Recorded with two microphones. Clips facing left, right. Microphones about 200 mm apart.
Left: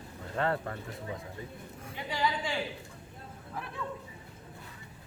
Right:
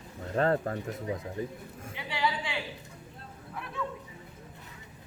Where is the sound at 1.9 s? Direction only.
45° left (ahead or behind).